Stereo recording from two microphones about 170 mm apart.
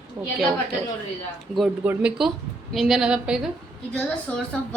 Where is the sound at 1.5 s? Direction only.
5° right (ahead or behind).